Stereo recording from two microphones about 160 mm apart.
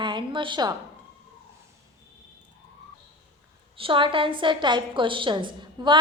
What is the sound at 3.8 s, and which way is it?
A woman's voice, 30° right (ahead or behind).